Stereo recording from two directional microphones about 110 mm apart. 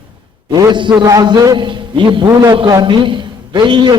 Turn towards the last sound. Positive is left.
turn(degrees=-45)  # may be behind; listen again after turning